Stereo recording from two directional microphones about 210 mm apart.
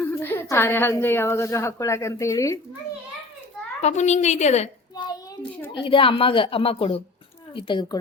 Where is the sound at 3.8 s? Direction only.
35° left (ahead or behind).